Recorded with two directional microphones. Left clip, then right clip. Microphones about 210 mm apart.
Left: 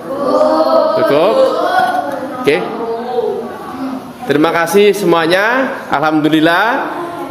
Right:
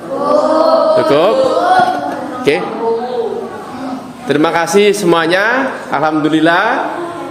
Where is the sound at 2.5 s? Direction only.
5° right (ahead or behind).